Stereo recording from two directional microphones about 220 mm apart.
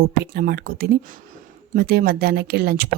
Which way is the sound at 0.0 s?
45° right (ahead or behind).